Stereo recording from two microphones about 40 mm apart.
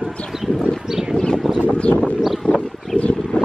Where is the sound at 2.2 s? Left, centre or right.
Centre.